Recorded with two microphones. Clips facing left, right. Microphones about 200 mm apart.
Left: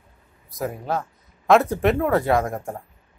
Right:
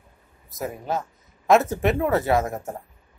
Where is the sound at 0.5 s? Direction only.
Centre (ahead or behind).